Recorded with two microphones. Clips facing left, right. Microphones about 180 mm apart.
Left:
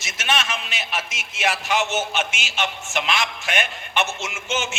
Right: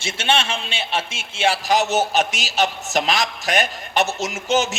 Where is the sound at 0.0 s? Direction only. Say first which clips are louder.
Right 4 dB; 30° right (ahead or behind).